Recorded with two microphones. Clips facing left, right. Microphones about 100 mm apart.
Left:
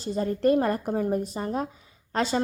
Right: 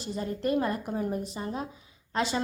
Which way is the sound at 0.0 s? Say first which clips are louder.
Left 7 dB; 40° left (ahead or behind).